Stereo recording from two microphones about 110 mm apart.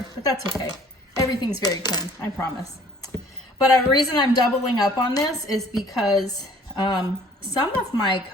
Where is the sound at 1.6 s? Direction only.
35° left (ahead or behind).